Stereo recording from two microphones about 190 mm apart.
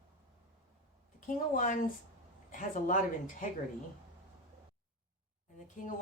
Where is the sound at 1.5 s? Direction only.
45° left (ahead or behind).